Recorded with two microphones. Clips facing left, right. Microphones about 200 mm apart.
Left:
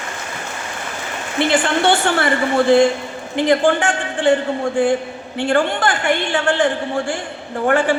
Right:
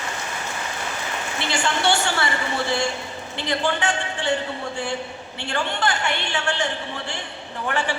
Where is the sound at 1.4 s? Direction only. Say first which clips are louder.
Left 8 dB; 55° left (ahead or behind).